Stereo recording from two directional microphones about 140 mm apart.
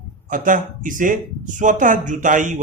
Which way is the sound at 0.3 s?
70° right (ahead or behind).